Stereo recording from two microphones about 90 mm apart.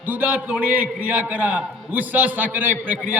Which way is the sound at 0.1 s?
20° right (ahead or behind).